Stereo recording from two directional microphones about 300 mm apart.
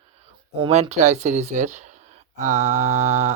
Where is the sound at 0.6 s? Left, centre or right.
Right.